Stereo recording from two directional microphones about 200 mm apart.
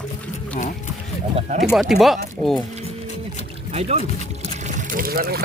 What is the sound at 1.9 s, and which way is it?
Speech, centre (ahead or behind).